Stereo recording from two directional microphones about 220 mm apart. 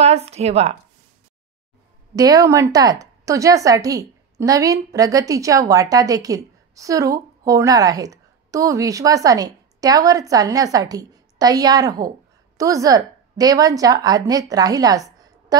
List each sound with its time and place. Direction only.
0.0 s a woman's voice: 30° right (ahead or behind)
2.1 s a woman's voice: 15° right (ahead or behind)